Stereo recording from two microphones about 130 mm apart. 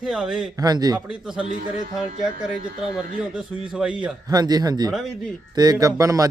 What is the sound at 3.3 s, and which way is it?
Speech, 5° right (ahead or behind).